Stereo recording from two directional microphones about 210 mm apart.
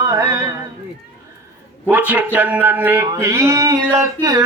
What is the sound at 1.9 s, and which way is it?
Male singing, 5° right (ahead or behind).